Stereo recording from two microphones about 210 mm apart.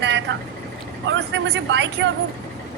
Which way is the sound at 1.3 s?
60° right (ahead or behind).